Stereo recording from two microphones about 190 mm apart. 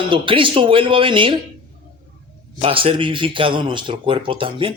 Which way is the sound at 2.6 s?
30° right (ahead or behind).